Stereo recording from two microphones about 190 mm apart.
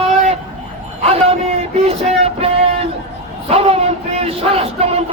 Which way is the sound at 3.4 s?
30° right (ahead or behind).